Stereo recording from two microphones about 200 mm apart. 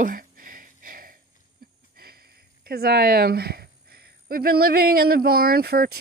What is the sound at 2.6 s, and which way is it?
Speech, 50° right (ahead or behind).